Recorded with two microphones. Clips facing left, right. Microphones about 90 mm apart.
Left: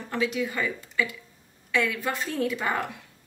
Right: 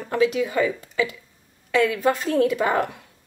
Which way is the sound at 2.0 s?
55° right (ahead or behind).